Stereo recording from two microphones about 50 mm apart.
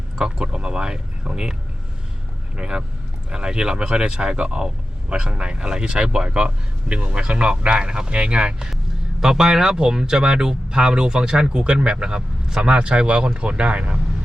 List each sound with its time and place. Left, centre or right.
0.2 s speech: centre
2.6 s speech: centre
9.2 s speech: centre